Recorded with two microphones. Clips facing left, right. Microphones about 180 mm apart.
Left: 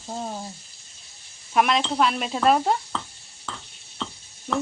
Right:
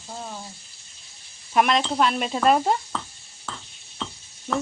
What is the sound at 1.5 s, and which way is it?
Speech, centre (ahead or behind).